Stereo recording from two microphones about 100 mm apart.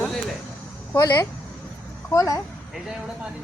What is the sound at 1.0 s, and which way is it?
A woman's voice, 40° left (ahead or behind).